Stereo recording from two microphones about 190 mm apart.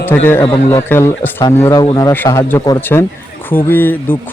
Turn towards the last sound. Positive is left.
turn(degrees=10)  # may be behind; listen again after turning